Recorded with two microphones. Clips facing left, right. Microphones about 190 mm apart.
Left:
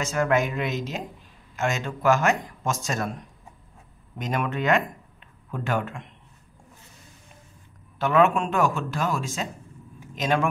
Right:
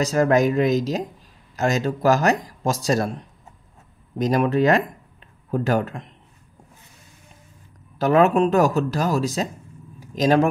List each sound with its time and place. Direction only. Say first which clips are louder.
0.0 s speech: right 6 dB; 35° right (ahead or behind)
8.0 s speech: right 4 dB; 40° right (ahead or behind)
9.9 s a sound: right 7 dB; 40° right (ahead or behind)